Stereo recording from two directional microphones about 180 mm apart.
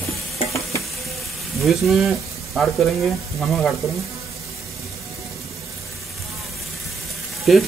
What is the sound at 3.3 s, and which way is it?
Stir, centre (ahead or behind).